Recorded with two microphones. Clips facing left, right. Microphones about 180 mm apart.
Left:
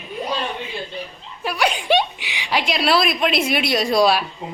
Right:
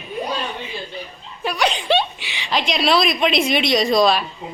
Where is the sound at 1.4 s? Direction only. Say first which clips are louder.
Even; 5° left (ahead or behind).